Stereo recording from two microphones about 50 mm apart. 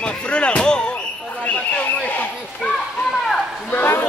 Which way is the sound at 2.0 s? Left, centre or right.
Left.